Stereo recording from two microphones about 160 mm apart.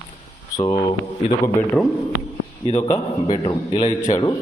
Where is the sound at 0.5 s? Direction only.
25° left (ahead or behind).